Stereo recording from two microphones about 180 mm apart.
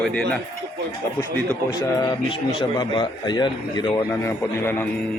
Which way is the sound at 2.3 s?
25° left (ahead or behind).